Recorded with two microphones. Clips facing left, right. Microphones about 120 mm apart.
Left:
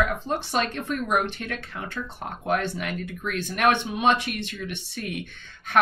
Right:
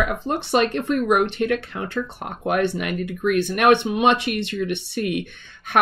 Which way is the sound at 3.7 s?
65° right (ahead or behind).